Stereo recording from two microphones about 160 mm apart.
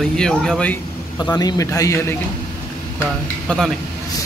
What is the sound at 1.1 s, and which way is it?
A man's voice, 25° left (ahead or behind).